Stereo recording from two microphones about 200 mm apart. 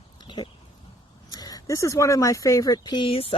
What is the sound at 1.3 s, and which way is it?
Speech, 20° left (ahead or behind).